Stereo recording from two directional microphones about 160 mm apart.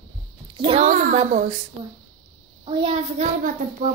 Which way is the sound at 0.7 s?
45° right (ahead or behind).